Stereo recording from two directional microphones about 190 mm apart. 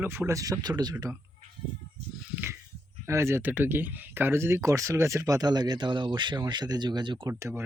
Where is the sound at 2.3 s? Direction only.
10° right (ahead or behind).